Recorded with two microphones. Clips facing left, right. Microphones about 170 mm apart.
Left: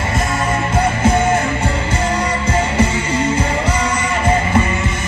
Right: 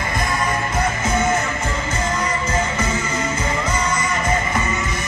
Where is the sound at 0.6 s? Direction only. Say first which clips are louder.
Left 5 dB; 10° left (ahead or behind).